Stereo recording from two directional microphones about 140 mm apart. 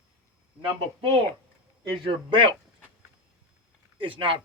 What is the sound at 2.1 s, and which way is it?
Speech, 35° right (ahead or behind).